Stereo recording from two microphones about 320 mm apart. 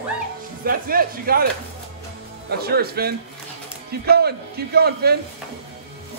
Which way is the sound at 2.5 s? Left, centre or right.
Right.